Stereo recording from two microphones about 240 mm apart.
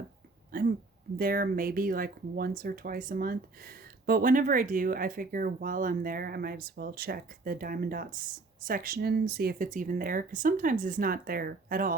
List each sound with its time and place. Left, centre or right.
0.5 s speech: right